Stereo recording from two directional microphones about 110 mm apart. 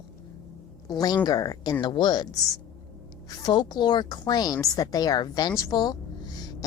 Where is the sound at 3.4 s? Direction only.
40° left (ahead or behind).